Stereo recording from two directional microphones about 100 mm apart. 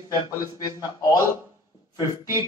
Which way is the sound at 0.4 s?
40° left (ahead or behind).